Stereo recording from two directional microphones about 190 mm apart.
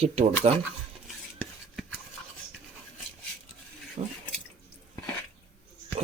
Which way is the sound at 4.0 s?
35° right (ahead or behind).